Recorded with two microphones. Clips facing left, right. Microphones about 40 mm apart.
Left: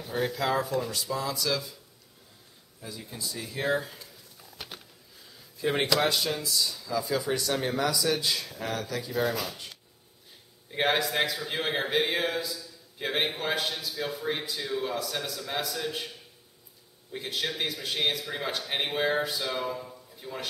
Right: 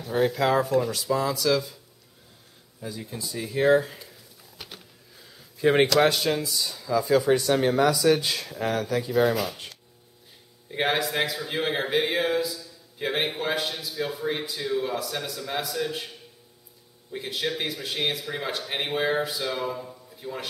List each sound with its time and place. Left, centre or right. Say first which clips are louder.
0.1 s speech: right 6 dB; centre
2.8 s speech: right 4 dB; centre
4.4 s a sound: left 1 dB; centre
5.6 s speech: right 6 dB; centre
8.2 s speech: right 3 dB; right
9.1 s speech: right 6 dB; centre
10.7 s speech: right 1 dB; centre
17.1 s speech: right 3 dB; centre